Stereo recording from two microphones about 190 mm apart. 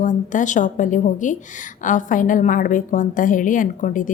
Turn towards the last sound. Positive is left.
turn(degrees=45)  # may be behind; listen again after turning